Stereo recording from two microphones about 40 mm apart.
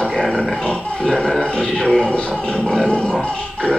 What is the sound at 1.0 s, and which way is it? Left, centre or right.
Dog, centre.